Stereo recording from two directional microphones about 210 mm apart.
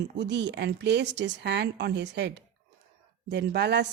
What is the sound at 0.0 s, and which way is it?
Speech, 55° right (ahead or behind).